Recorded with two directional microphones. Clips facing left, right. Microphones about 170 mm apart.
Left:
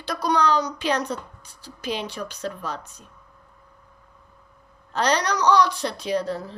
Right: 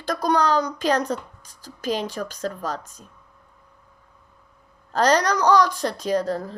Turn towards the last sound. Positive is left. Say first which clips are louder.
# right 2 dB
turn(degrees=-45)  # may be behind; listen again after turning